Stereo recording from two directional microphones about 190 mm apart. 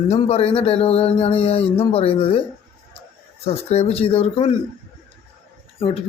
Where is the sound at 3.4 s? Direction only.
35° left (ahead or behind).